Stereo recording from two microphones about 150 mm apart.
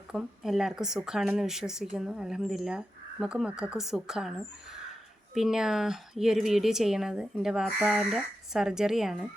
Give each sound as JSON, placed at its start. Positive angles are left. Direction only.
{"t": 0.1, "sound": "a woman's voice", "side_deg": 0}